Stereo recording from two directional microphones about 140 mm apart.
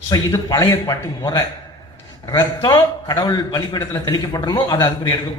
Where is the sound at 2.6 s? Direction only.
25° left (ahead or behind).